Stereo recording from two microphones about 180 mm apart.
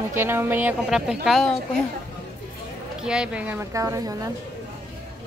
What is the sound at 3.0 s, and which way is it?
A woman's voice, 5° right (ahead or behind).